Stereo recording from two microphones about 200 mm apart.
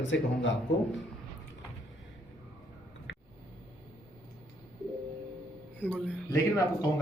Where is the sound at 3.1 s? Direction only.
65° left (ahead or behind).